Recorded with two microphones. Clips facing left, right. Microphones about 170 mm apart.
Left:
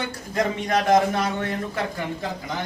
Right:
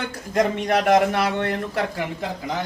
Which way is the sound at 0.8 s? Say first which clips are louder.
Right 1 dB; 70° right (ahead or behind).